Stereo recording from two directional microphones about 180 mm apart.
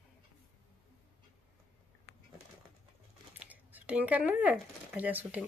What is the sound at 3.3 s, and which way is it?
Speech, 10° right (ahead or behind).